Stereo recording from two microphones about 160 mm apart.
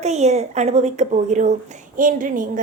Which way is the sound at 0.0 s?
45° right (ahead or behind).